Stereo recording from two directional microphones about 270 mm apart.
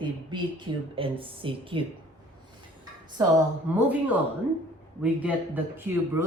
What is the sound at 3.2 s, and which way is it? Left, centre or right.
Speech, centre.